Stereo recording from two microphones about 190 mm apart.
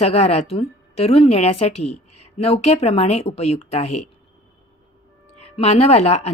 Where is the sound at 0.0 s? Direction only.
35° left (ahead or behind).